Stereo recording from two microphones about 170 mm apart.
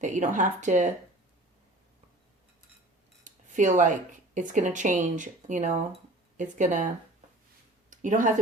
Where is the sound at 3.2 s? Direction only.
45° right (ahead or behind).